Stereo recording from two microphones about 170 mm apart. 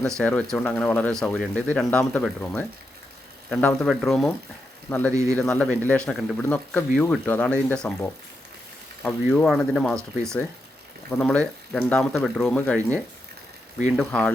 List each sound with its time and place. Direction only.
0.2 s speech: 5° left (ahead or behind)
5.1 s speech: 20° right (ahead or behind)
5.4 s speech: 10° left (ahead or behind)
11.1 s speech: 5° left (ahead or behind)